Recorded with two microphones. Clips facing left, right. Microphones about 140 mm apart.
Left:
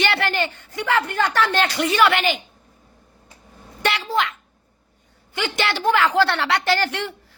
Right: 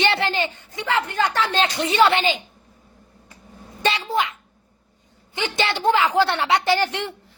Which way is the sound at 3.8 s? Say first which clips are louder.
Even; 20° right (ahead or behind).